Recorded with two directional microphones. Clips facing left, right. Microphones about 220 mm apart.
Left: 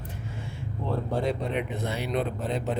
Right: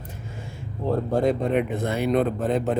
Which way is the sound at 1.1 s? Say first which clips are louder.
Right 7 dB; 50° right (ahead or behind).